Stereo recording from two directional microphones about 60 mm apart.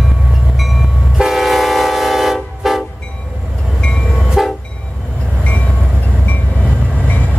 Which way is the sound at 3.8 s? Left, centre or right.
Centre.